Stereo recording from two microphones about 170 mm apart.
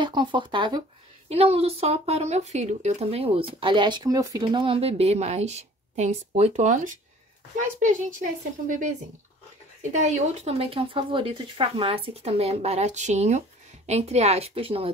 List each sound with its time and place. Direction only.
0.0 s speech: 25° right (ahead or behind)
1.3 s speech: 35° right (ahead or behind)